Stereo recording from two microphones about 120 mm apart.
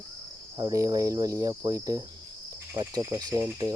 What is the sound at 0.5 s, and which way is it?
Cricket, 30° right (ahead or behind).